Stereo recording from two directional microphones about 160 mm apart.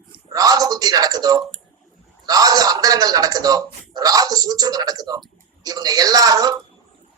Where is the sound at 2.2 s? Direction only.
25° right (ahead or behind).